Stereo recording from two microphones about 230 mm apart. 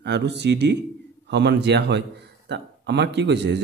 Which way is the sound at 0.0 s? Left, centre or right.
Right.